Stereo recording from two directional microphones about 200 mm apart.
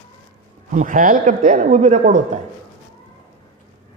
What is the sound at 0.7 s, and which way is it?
A man's voice, 40° right (ahead or behind).